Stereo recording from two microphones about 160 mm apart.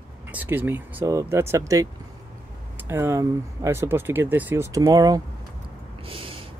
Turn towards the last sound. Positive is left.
turn(degrees=-35)  # may be behind; listen again after turning